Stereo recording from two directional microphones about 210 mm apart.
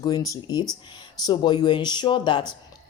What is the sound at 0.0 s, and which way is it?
Speech, 15° left (ahead or behind).